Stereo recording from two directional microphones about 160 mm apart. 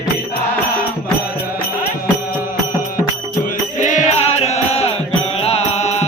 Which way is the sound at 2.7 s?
60° left (ahead or behind).